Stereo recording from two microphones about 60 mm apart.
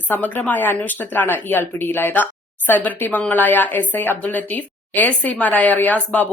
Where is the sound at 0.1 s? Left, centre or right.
Left.